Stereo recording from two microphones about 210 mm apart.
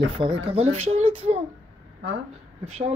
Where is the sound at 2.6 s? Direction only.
30° right (ahead or behind).